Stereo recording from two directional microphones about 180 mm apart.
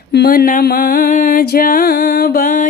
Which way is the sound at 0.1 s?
60° left (ahead or behind).